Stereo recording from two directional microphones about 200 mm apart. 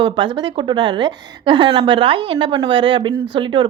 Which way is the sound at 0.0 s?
25° right (ahead or behind).